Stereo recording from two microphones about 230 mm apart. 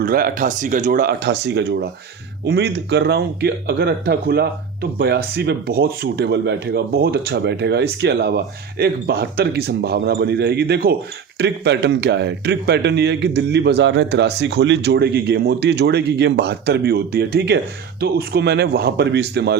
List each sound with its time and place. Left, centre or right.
0.0 s a man's voice: right